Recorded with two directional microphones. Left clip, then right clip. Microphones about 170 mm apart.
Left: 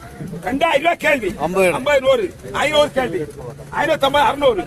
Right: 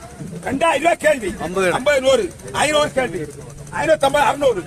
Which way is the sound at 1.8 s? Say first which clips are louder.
Even; 30° right (ahead or behind).